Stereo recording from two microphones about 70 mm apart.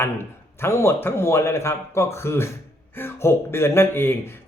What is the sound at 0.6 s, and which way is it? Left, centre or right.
Speech, left.